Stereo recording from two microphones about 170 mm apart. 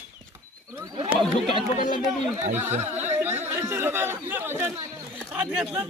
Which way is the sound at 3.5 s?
15° right (ahead or behind).